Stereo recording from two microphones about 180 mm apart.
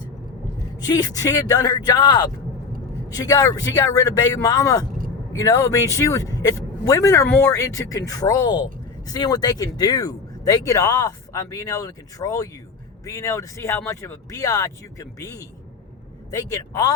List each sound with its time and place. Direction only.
0.8 s speech: 20° left (ahead or behind)